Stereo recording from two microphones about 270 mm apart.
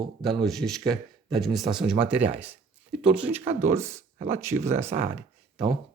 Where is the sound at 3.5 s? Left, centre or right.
Right.